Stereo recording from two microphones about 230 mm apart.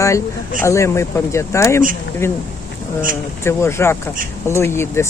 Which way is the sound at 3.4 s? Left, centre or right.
Centre.